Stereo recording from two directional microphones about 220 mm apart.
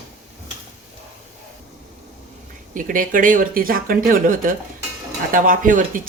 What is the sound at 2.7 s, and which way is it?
Speech, 40° right (ahead or behind).